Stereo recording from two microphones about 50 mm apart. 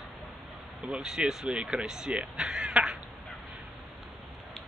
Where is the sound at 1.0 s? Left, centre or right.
Centre.